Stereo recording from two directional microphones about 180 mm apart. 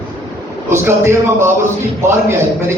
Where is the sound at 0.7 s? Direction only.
15° right (ahead or behind).